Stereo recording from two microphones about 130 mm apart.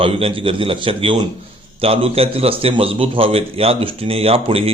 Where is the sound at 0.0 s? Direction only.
45° right (ahead or behind).